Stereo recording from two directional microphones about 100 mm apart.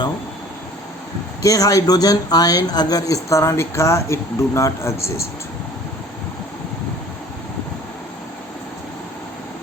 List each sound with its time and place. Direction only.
1.4 s speech: 35° left (ahead or behind)